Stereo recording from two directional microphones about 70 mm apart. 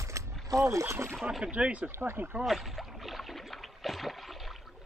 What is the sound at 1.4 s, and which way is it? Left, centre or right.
Speech, centre.